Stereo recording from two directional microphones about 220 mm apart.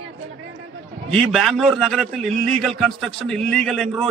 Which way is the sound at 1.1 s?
Centre (ahead or behind).